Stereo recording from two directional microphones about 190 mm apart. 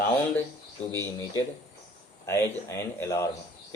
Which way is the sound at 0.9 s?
15° left (ahead or behind).